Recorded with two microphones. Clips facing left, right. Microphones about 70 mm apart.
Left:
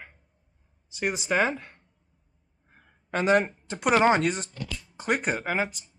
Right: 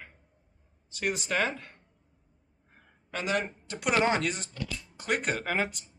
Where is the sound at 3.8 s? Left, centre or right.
Left.